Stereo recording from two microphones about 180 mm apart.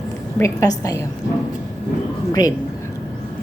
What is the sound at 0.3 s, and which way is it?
Speech, 15° left (ahead or behind).